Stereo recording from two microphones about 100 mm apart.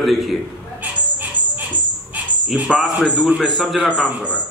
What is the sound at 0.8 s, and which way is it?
Bird, 15° right (ahead or behind).